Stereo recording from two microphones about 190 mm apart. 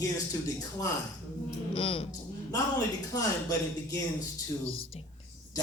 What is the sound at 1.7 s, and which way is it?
Speech, 30° left (ahead or behind).